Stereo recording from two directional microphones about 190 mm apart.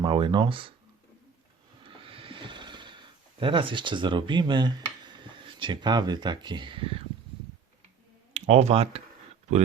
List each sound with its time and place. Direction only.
0.0 s speech: 25° right (ahead or behind)
1.8 s snoring: 25° right (ahead or behind)
8.3 s speech: 35° right (ahead or behind)